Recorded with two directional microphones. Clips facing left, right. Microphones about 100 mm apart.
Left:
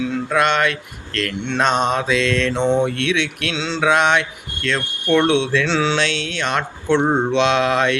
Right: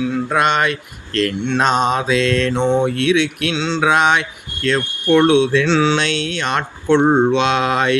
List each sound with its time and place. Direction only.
0.3 s speech: 10° right (ahead or behind)
1.5 s mantra: 5° right (ahead or behind)
7.0 s speech: 25° right (ahead or behind)
7.3 s mantra: centre (ahead or behind)